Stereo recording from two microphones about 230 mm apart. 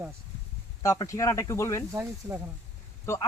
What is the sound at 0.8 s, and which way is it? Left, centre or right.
Speech, centre.